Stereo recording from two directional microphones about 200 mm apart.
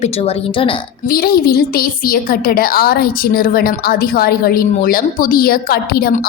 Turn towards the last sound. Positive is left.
turn(degrees=50)  # may be behind; listen again after turning